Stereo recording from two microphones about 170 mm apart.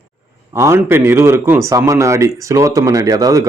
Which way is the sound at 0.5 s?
15° right (ahead or behind).